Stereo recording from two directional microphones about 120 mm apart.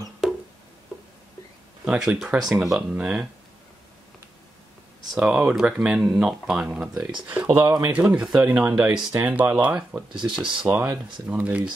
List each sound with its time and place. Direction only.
0.2 s music: centre (ahead or behind)
1.9 s speech: 10° right (ahead or behind)
2.1 s speech: centre (ahead or behind)
5.1 s speech: 5° right (ahead or behind)
7.6 s speech: 25° right (ahead or behind)
7.9 s speech: 10° right (ahead or behind)